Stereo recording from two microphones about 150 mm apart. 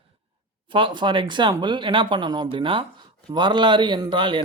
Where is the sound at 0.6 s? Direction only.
35° right (ahead or behind).